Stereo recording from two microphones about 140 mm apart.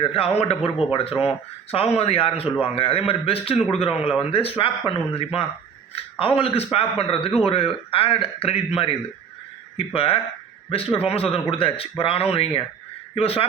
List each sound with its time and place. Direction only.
0.1 s a man's voice: 45° left (ahead or behind)